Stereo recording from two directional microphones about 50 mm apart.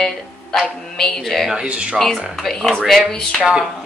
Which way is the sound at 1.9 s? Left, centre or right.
Centre.